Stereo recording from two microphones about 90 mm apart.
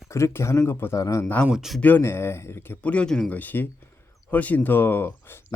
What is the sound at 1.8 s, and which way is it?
Speech, 25° left (ahead or behind).